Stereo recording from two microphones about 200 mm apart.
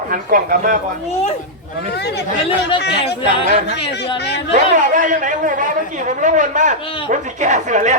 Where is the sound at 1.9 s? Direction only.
55° left (ahead or behind).